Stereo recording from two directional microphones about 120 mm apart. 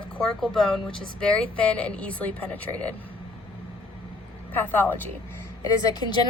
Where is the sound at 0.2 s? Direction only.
5° left (ahead or behind).